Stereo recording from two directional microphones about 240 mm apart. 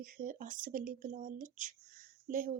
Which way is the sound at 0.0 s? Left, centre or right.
Right.